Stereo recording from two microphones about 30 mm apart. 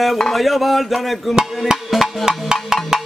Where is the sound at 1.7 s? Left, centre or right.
Centre.